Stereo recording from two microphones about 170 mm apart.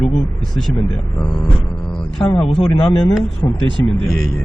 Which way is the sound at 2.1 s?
5° left (ahead or behind).